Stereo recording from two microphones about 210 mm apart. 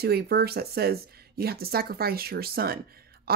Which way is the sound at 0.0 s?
50° right (ahead or behind).